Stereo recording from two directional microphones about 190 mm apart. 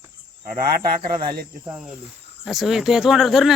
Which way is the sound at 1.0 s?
25° right (ahead or behind).